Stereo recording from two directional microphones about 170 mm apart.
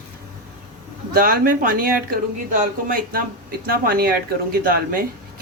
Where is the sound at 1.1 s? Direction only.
55° right (ahead or behind).